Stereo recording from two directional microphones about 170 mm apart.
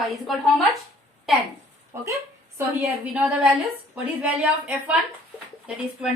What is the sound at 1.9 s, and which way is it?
A woman's voice, 15° right (ahead or behind).